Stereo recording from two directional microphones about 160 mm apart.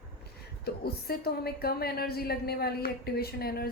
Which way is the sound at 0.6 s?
75° left (ahead or behind).